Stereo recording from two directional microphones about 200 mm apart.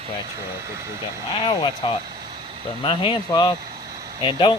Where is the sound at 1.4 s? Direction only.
25° left (ahead or behind).